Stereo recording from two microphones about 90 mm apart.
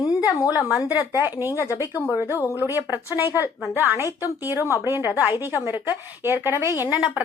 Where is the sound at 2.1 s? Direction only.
25° right (ahead or behind).